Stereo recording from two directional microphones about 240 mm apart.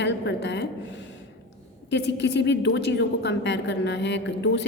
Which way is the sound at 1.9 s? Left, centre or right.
Left.